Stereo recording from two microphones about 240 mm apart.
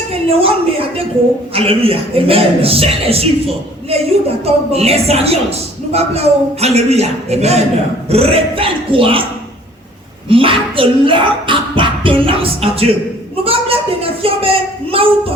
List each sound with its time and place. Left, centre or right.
0.1 s a woman's voice: right
10.2 s a woman's voice: right